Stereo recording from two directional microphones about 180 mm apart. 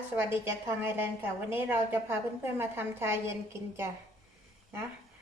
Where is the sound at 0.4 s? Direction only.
15° right (ahead or behind).